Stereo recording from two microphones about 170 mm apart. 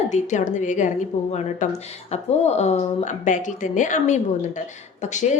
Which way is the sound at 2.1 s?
40° left (ahead or behind).